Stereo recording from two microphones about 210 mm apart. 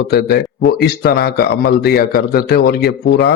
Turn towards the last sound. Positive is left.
turn(degrees=50)  # may be behind; listen again after turning